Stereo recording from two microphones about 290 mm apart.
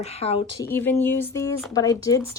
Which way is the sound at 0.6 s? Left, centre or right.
Centre.